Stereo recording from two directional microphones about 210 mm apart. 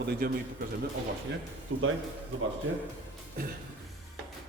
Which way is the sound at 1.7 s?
70° right (ahead or behind).